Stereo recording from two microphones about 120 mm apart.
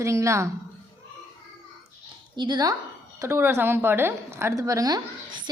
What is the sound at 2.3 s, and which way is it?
Speech, 40° right (ahead or behind).